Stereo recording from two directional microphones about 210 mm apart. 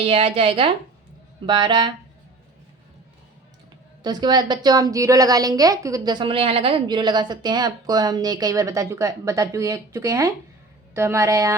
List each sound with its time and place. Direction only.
0.0 s a woman's voice: 30° right (ahead or behind)
4.0 s a woman's voice: 20° right (ahead or behind)